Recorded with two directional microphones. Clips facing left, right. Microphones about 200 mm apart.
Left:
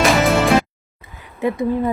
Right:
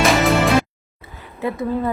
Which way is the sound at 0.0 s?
Centre (ahead or behind).